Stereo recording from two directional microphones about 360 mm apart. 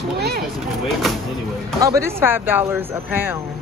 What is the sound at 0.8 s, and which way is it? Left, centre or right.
Speech, centre.